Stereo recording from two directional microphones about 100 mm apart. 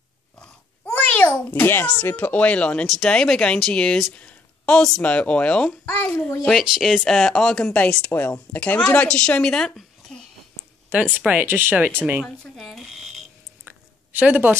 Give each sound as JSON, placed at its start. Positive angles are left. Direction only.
{"t": 0.4, "sound": "a sound", "side_deg": 15}
{"t": 2.9, "sound": "speech", "side_deg": 5}
{"t": 6.7, "sound": "speech", "side_deg": -5}
{"t": 10.9, "sound": "speech", "side_deg": -15}
{"t": 12.5, "sound": "speech", "side_deg": 0}
{"t": 13.7, "sound": "a sound", "side_deg": -15}